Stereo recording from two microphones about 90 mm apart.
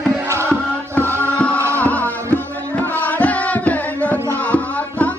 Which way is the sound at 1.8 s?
15° left (ahead or behind).